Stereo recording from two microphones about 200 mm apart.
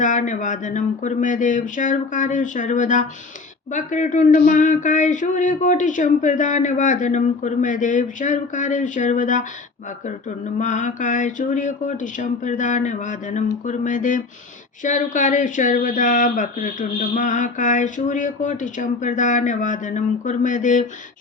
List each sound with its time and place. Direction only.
0.0 s speech: 40° left (ahead or behind)